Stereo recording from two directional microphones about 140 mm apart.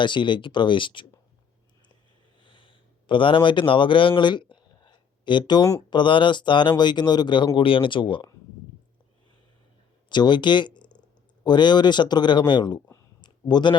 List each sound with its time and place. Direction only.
0.0 s speech: 35° left (ahead or behind)
2.4 s speech: 40° left (ahead or behind)
10.1 s speech: 30° left (ahead or behind)
13.2 s a sound: 30° left (ahead or behind)